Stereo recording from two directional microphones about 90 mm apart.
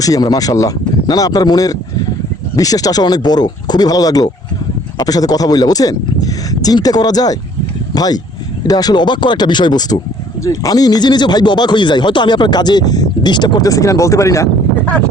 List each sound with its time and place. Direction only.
0.0 s a man's voice: 45° left (ahead or behind)
10.4 s speech: 40° left (ahead or behind)